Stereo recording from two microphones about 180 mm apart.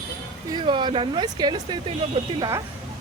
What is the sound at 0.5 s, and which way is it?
Speech, 25° right (ahead or behind).